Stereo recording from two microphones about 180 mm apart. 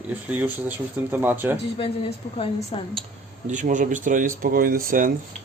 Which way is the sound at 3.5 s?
45° right (ahead or behind).